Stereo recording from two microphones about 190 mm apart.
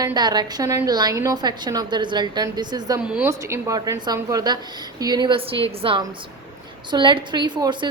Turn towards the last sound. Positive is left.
turn(degrees=-25)  # may be behind; listen again after turning